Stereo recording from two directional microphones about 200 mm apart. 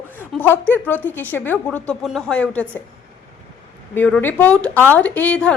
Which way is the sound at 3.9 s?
10° left (ahead or behind).